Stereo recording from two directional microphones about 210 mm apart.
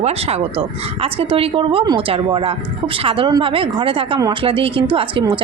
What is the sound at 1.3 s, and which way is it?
A woman's voice, 25° right (ahead or behind).